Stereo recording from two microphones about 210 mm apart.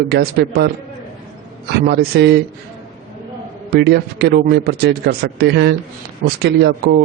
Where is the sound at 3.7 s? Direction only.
50° right (ahead or behind).